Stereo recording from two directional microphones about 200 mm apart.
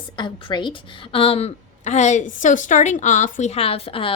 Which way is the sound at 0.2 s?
20° left (ahead or behind).